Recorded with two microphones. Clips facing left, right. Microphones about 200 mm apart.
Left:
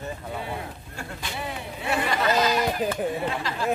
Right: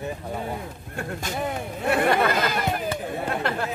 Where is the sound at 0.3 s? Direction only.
45° right (ahead or behind).